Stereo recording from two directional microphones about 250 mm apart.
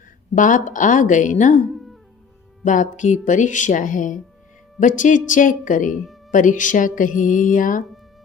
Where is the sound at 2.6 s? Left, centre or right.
Left.